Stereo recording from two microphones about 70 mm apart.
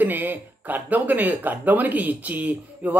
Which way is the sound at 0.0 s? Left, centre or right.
Right.